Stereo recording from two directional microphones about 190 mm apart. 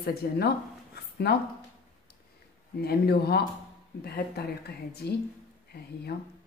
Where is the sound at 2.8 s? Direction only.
55° left (ahead or behind).